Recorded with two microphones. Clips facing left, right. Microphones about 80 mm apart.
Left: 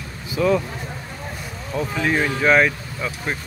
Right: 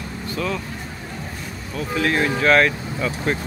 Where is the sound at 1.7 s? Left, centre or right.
Centre.